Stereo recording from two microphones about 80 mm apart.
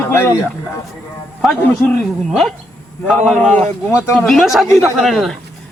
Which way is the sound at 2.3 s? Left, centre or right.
Centre.